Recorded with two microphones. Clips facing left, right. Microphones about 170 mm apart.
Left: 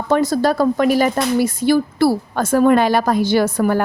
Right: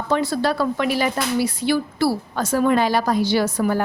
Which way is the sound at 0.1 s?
45° left (ahead or behind).